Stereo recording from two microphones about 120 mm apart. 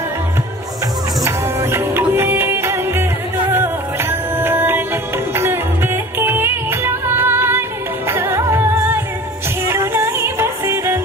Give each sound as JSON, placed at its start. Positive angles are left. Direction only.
{"t": 1.2, "sound": "music", "side_deg": -20}